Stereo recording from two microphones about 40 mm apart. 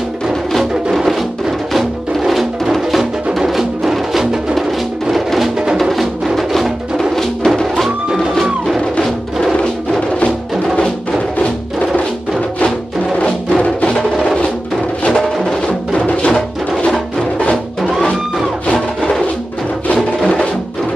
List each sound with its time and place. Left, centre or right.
2.1 s music: centre
5.1 s music: centre
10.8 s music: left
13.8 s music: centre
16.3 s music: centre